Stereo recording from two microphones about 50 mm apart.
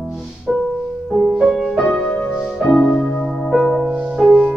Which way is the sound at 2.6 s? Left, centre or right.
Centre.